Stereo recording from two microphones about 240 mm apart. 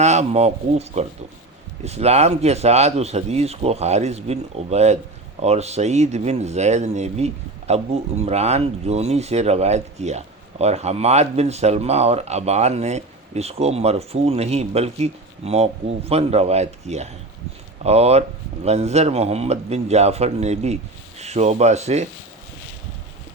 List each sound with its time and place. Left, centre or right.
0.0 s speech: right